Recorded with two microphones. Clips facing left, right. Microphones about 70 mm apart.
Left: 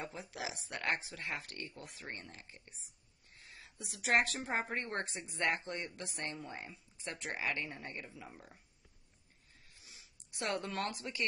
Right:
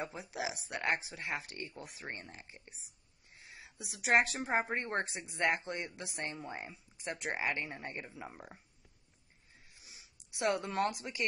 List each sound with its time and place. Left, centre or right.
0.0 s speech: centre
9.8 s a sound: centre
10.4 s speech: centre